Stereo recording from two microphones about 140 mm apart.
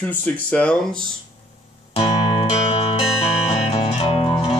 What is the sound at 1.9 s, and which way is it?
Music, 40° left (ahead or behind).